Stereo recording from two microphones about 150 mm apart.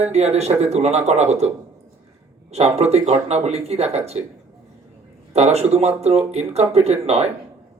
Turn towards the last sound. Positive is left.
turn(degrees=-45)  # may be behind; listen again after turning